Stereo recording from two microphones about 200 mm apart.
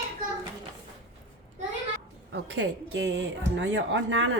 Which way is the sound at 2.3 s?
65° right (ahead or behind).